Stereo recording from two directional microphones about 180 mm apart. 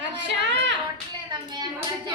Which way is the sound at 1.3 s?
25° right (ahead or behind).